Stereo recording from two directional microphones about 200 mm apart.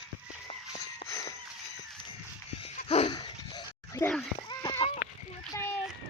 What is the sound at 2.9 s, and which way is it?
Dog, 25° left (ahead or behind).